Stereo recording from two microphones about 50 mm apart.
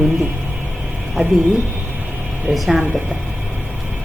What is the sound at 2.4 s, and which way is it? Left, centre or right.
Speech, centre.